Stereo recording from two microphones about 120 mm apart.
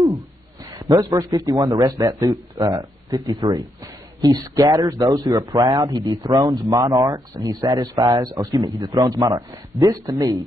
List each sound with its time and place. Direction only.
0.7 s a man's voice: 30° right (ahead or behind)